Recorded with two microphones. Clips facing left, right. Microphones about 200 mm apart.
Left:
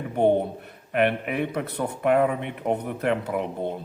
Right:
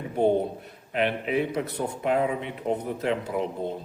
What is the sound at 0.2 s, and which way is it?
A man's voice, 60° left (ahead or behind).